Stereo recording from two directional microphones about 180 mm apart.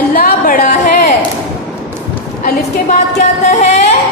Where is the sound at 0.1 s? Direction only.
50° left (ahead or behind).